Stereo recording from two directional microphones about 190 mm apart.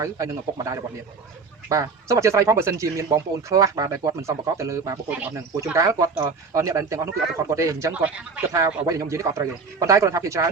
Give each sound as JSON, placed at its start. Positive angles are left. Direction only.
{"t": 0.0, "sound": "speech", "side_deg": -15}